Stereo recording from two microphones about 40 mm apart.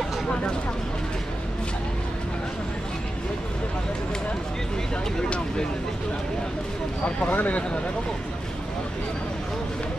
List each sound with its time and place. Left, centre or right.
7.2 s speech: left